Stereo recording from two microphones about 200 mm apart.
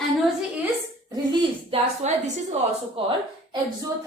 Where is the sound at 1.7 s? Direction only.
35° right (ahead or behind).